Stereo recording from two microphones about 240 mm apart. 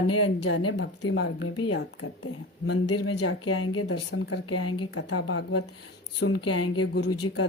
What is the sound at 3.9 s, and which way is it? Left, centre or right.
Speech, left.